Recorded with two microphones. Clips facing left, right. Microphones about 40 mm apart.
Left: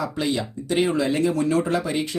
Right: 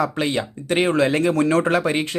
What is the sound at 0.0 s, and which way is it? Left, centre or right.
Speech, right.